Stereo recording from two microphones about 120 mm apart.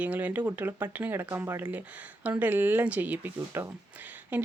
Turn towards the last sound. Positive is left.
turn(degrees=-15)  # may be behind; listen again after turning